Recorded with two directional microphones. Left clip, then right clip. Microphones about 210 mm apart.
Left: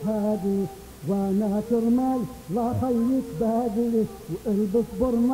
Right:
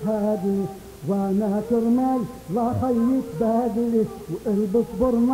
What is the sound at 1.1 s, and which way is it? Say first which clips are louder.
Music: right 2 dB; 30° right (ahead or behind).